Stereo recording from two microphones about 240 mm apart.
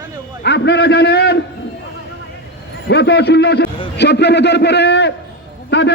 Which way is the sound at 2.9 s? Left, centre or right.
Left.